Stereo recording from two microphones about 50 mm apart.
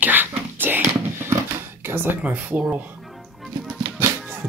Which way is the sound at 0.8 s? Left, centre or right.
Right.